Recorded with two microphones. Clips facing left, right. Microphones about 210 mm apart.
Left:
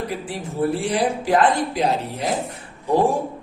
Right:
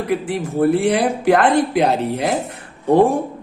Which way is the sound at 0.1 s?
60° right (ahead or behind).